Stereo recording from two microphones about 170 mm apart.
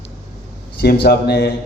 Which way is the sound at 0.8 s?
70° left (ahead or behind).